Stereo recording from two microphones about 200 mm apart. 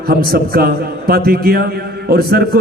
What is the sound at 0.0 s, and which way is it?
A man's voice, 50° right (ahead or behind).